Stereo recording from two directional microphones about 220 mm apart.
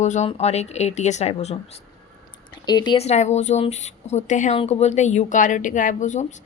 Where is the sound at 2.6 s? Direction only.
20° left (ahead or behind).